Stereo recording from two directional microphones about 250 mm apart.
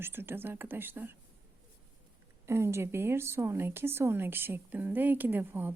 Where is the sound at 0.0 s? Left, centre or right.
Centre.